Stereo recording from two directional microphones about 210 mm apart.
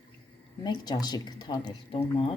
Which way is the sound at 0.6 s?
20° left (ahead or behind).